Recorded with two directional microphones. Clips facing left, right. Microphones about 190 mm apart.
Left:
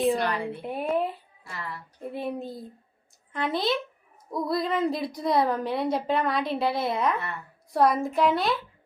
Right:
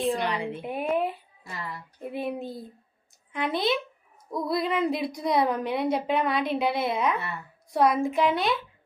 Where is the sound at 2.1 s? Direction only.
Centre (ahead or behind).